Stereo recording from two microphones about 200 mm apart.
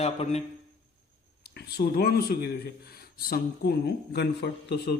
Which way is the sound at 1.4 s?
55° left (ahead or behind).